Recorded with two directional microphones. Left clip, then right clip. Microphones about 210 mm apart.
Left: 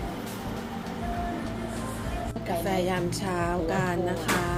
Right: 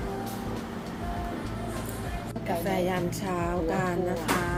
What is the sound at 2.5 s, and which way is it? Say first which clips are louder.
Speech: even; centre (ahead or behind).